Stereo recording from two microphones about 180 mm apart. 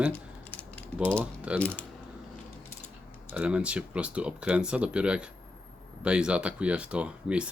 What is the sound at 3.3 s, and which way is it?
Speech, 5° right (ahead or behind).